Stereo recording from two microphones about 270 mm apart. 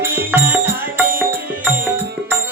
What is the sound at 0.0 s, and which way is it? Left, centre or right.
Music, centre.